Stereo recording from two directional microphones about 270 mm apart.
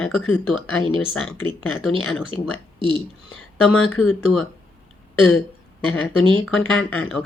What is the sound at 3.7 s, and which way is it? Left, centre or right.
Speech, centre.